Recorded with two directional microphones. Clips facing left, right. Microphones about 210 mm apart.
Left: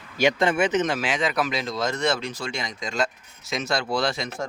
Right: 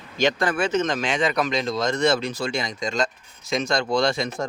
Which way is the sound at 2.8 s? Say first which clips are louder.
Left 2 dB; 5° left (ahead or behind).